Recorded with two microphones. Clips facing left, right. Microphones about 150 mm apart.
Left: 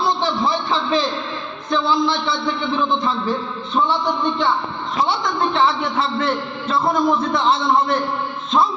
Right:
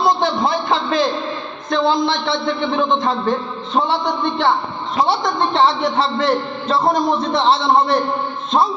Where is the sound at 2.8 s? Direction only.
40° right (ahead or behind).